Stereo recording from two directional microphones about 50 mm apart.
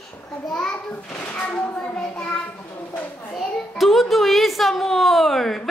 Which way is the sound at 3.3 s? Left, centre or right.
Centre.